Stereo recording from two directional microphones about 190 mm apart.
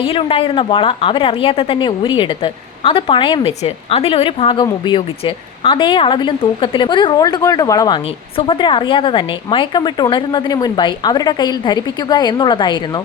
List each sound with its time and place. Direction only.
0.0 s a woman's voice: 30° left (ahead or behind)